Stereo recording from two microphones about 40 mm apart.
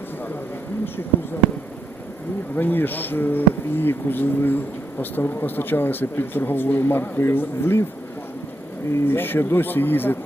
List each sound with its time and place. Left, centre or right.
2.6 s speech: left
8.9 s speech: left